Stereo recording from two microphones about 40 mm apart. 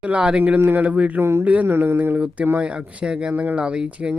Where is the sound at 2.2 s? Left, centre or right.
Right.